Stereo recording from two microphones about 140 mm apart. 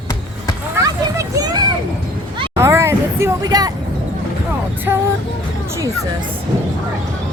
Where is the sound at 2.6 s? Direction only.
20° right (ahead or behind).